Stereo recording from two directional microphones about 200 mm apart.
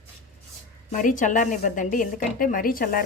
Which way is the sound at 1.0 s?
40° left (ahead or behind).